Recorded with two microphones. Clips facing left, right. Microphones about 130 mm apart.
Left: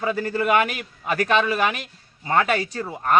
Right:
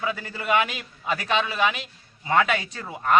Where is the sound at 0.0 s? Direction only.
45° left (ahead or behind).